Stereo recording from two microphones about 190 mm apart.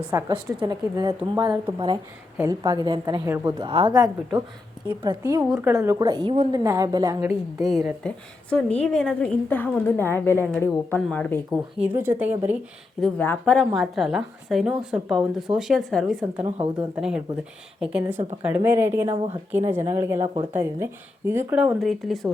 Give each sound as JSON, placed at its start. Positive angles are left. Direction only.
{"t": 0.0, "sound": "a woman's voice", "side_deg": -10}
{"t": 3.2, "sound": "speech", "side_deg": -10}
{"t": 3.6, "sound": "a woman's voice", "side_deg": -25}
{"t": 6.6, "sound": "speech", "side_deg": -20}
{"t": 7.7, "sound": "a woman's voice", "side_deg": 0}
{"t": 11.8, "sound": "speech", "side_deg": -10}
{"t": 13.0, "sound": "a woman's voice", "side_deg": 10}
{"t": 18.4, "sound": "speech", "side_deg": -10}
{"t": 19.0, "sound": "a woman's voice", "side_deg": -30}
{"t": 19.7, "sound": "speech", "side_deg": -10}
{"t": 20.1, "sound": "a woman's voice", "side_deg": -30}
{"t": 20.5, "sound": "speech", "side_deg": -15}